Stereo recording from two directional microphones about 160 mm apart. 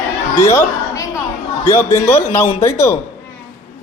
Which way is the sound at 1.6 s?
15° left (ahead or behind).